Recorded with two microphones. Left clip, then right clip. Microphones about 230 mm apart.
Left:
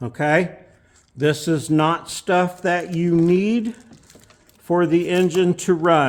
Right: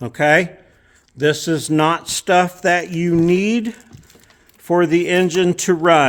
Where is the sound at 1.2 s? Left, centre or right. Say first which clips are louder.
Right 3 dB; centre; by 6.0 s right.